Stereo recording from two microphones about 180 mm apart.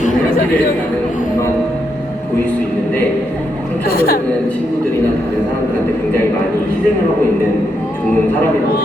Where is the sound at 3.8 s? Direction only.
55° left (ahead or behind).